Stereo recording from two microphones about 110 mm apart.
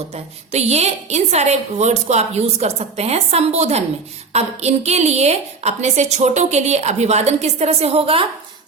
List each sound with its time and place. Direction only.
0.1 s a woman's voice: 75° right (ahead or behind); by 8.3 s 55° right (ahead or behind)